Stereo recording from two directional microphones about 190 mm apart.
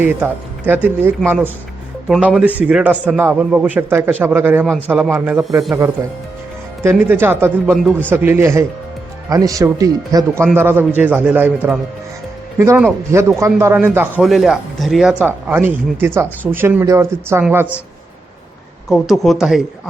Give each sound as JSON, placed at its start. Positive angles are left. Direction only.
{"t": 0.0, "sound": "speech", "side_deg": -10}
{"t": 5.7, "sound": "speech", "side_deg": -15}
{"t": 18.9, "sound": "speech", "side_deg": 0}